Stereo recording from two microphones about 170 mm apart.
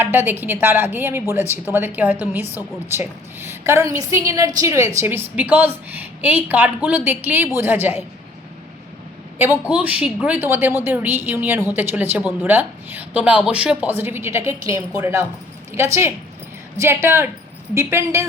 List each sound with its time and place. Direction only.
0.0 s a woman's voice: 10° right (ahead or behind)
9.4 s a woman's voice: 10° right (ahead or behind)